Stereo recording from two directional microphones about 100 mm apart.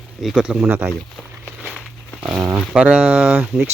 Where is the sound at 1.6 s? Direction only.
5° right (ahead or behind).